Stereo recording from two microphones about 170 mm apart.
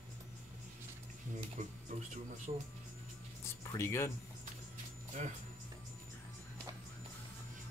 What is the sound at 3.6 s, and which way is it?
Speech, 15° left (ahead or behind).